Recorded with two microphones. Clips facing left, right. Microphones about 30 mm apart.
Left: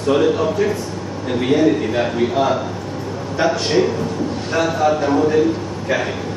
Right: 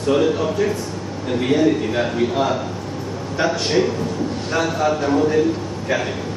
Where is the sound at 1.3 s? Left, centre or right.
Centre.